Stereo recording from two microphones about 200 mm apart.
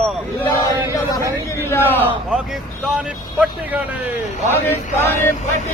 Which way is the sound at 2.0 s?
10° right (ahead or behind).